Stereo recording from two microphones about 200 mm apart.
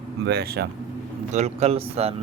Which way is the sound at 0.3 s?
55° right (ahead or behind).